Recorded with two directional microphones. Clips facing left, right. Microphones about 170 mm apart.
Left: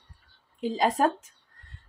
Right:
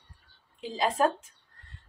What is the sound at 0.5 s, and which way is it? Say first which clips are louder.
Speech: left 4 dB; 45° left (ahead or behind).